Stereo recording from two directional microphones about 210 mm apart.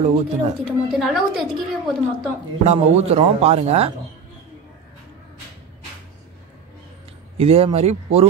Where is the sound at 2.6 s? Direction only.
30° right (ahead or behind).